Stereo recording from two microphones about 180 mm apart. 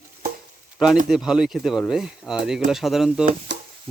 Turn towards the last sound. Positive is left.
turn(degrees=-80)